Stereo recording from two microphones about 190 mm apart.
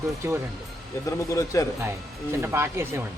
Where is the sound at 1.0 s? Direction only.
15° left (ahead or behind).